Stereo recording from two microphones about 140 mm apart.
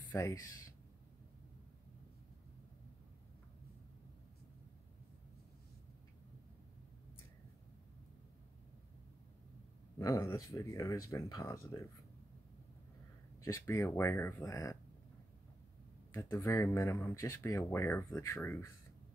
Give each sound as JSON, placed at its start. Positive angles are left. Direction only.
{"t": 0.1, "sound": "speech", "side_deg": 20}
{"t": 9.9, "sound": "speech", "side_deg": 25}
{"t": 13.4, "sound": "speech", "side_deg": 20}
{"t": 16.1, "sound": "speech", "side_deg": 25}